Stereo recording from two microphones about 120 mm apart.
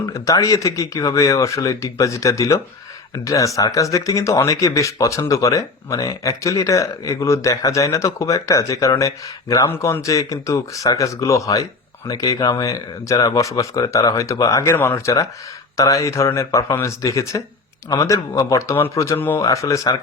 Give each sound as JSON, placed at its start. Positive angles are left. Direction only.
{"t": 0.0, "sound": "speech", "side_deg": 30}